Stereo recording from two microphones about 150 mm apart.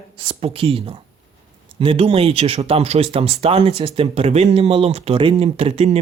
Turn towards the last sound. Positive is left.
turn(degrees=-40)  # may be behind; listen again after turning